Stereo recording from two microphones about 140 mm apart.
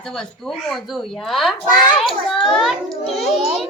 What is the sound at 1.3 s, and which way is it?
Music, centre (ahead or behind).